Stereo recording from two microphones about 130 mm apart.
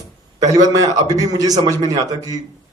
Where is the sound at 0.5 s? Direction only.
30° right (ahead or behind).